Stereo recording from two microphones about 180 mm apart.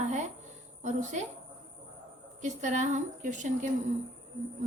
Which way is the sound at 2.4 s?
40° right (ahead or behind).